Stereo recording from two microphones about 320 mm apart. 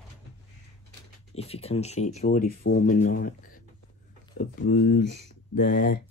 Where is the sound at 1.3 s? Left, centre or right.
Centre.